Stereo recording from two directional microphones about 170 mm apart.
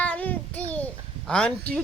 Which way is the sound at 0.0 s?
10° left (ahead or behind).